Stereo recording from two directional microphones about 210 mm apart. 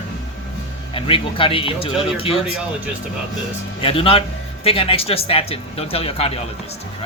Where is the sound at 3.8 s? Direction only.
25° left (ahead or behind).